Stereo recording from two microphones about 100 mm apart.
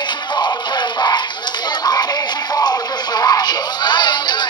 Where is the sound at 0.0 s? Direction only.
50° left (ahead or behind).